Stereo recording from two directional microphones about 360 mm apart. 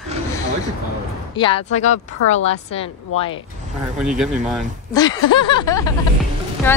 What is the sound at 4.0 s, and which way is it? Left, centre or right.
Speech, centre.